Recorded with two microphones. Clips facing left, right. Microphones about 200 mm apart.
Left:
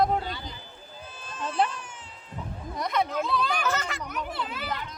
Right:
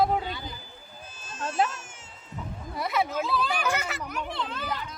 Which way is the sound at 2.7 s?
5° right (ahead or behind).